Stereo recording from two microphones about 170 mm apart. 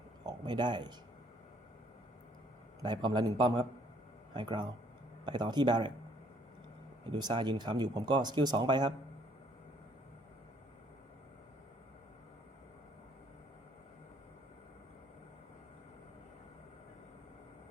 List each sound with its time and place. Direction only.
0.3 s speech: 25° right (ahead or behind)
2.8 s speech: 25° right (ahead or behind)
7.1 s speech: 25° right (ahead or behind)